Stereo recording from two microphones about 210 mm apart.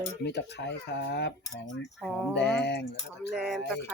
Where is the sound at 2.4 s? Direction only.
55° left (ahead or behind).